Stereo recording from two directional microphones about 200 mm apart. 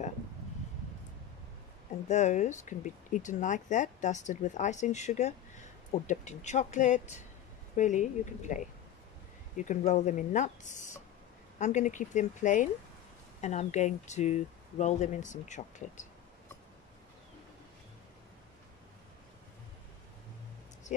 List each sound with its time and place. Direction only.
2.0 s speech: 35° left (ahead or behind)
9.7 s speech: 35° left (ahead or behind)